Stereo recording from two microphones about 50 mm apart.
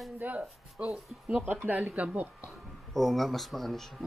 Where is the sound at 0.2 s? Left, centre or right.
Right.